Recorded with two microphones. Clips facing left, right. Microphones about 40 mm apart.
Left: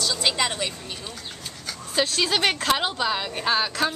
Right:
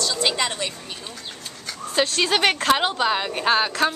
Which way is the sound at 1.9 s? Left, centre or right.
Centre.